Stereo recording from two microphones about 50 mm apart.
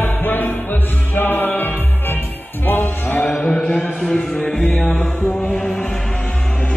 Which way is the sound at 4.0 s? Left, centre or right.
Centre.